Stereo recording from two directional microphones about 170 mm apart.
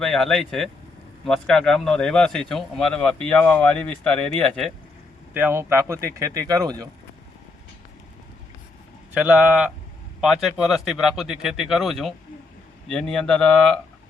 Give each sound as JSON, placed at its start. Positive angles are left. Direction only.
{"t": 0.0, "sound": "speech", "side_deg": 5}
{"t": 5.3, "sound": "speech", "side_deg": -10}
{"t": 9.1, "sound": "speech", "side_deg": -10}